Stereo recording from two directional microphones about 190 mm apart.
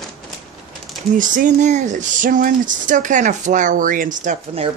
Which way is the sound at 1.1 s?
45° right (ahead or behind).